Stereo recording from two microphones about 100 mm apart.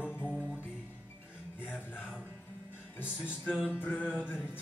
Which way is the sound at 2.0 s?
10° right (ahead or behind).